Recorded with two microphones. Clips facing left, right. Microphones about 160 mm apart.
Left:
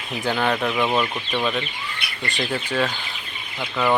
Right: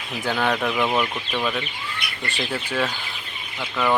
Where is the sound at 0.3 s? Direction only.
Centre (ahead or behind).